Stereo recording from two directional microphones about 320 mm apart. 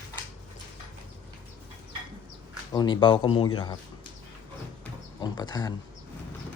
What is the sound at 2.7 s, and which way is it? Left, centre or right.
Speech, centre.